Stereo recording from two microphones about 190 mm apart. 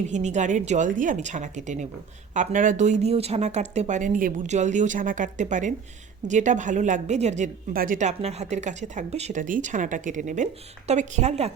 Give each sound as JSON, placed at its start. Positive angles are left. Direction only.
{"t": 0.1, "sound": "speech", "side_deg": -40}